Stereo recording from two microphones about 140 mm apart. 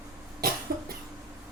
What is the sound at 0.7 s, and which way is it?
Cough, 90° right.